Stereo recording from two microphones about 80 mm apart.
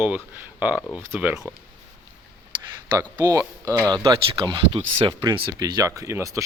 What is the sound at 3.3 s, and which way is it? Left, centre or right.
Speech, right.